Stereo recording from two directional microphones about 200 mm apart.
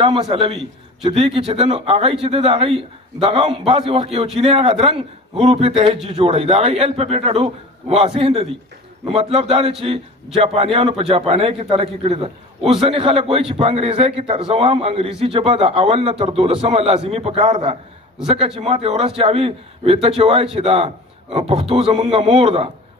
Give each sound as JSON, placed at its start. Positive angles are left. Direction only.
{"t": 0.0, "sound": "a man's voice", "side_deg": -25}